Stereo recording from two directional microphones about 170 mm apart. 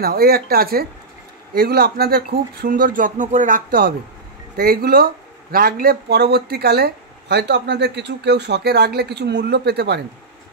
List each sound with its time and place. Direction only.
0.0 s speech: 65° right (ahead or behind)